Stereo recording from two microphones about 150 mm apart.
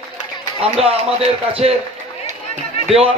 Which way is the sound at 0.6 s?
40° right (ahead or behind).